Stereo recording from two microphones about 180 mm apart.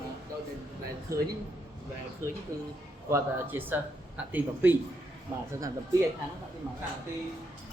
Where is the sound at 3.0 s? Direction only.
15° right (ahead or behind).